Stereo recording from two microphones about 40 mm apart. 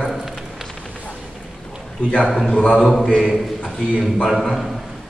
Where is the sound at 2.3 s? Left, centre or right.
Centre.